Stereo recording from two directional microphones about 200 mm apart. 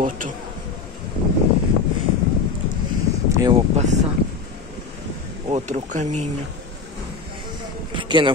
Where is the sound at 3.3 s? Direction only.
15° right (ahead or behind).